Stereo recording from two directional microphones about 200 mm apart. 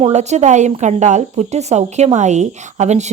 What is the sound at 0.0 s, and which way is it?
Speech, 35° right (ahead or behind).